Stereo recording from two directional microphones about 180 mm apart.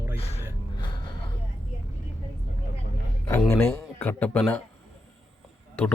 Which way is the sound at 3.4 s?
15° left (ahead or behind).